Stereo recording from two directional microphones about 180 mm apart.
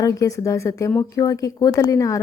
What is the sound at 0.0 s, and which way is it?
Speech, 20° left (ahead or behind).